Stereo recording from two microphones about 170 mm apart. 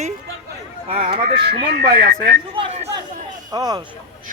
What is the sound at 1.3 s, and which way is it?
Speech, 75° right (ahead or behind).